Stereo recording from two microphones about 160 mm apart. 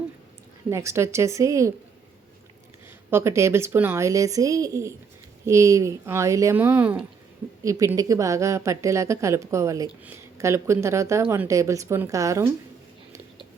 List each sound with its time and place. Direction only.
0.7 s speech: 15° right (ahead or behind)
3.1 s speech: 15° right (ahead or behind)
7.6 s a woman's voice: 20° right (ahead or behind)